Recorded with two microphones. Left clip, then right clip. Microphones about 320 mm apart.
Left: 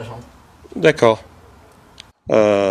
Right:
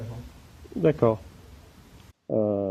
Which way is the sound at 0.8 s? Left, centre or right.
Left.